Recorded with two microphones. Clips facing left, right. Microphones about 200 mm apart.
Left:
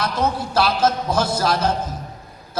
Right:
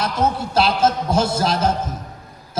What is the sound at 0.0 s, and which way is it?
A man's voice, 25° right (ahead or behind).